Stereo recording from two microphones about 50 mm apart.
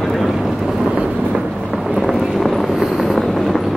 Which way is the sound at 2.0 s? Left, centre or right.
Centre.